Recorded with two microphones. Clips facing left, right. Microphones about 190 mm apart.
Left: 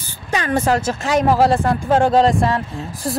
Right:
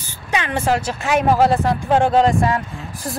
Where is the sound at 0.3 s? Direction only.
40° left (ahead or behind).